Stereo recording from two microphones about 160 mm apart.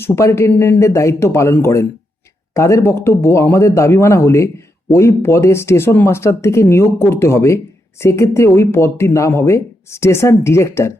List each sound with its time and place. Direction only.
0.0 s speech: 15° left (ahead or behind)